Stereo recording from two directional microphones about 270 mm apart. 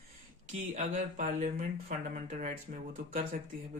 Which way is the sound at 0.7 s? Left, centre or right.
Right.